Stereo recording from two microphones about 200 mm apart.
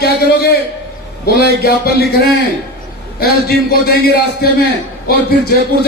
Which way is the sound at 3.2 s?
50° left (ahead or behind).